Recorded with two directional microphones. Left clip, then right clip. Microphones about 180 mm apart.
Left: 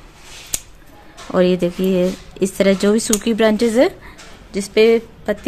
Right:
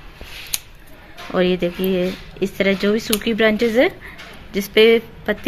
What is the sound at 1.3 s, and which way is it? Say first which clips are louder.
Speech: left 3 dB; 35° left (ahead or behind).